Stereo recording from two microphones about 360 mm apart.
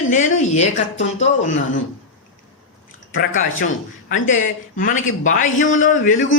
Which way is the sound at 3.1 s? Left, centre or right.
Left.